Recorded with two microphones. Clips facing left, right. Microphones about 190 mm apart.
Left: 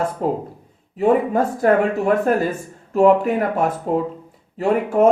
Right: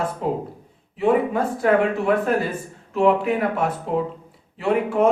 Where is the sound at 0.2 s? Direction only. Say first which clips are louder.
Left 3 dB; 45° left (ahead or behind).